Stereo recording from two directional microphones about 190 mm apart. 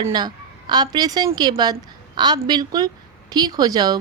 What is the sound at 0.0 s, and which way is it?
A woman's voice, 25° right (ahead or behind).